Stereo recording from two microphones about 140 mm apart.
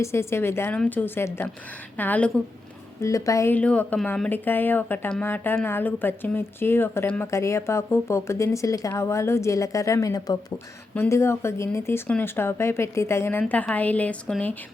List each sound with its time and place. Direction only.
0.0 s speech: 20° left (ahead or behind)
3.0 s speech: 25° left (ahead or behind)
3.5 s speech: 10° left (ahead or behind)